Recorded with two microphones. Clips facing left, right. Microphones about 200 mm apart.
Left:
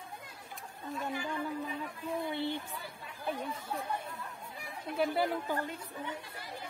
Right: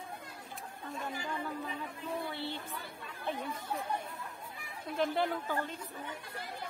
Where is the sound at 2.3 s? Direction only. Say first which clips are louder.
Left 5 dB; 15° left (ahead or behind).